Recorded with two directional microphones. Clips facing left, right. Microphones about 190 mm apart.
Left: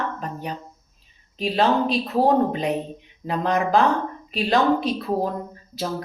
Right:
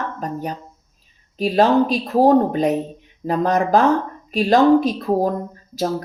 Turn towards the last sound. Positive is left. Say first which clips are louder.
# right 5 dB
turn(degrees=-40)  # may be behind; listen again after turning